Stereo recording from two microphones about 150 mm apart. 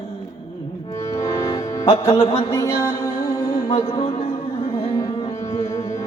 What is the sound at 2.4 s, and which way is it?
Music, 20° left (ahead or behind).